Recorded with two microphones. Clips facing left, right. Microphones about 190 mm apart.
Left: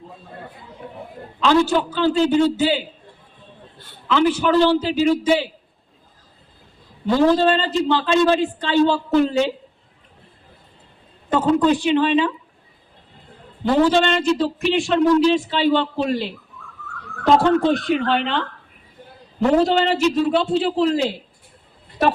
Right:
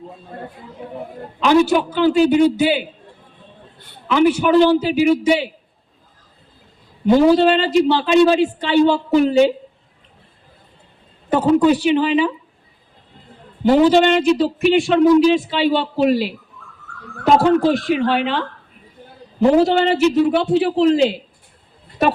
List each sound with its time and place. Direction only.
1.4 s a man's voice: 15° right (ahead or behind)
7.1 s a man's voice: 15° right (ahead or behind)
11.3 s a man's voice: 10° right (ahead or behind)
13.8 s a man's voice: 20° right (ahead or behind)